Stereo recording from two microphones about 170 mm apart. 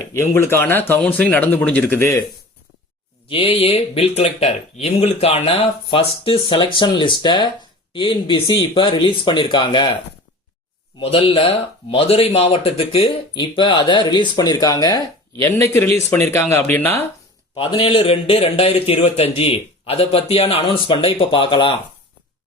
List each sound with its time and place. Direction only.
0.0 s speech: 15° left (ahead or behind)
3.2 s a man's voice: 35° left (ahead or behind)
11.0 s a man's voice: 35° left (ahead or behind); by 17.0 s 10° left (ahead or behind)
17.5 s a man's voice: 30° left (ahead or behind)